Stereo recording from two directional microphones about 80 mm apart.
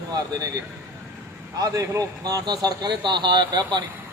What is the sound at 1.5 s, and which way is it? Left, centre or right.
Speech, right.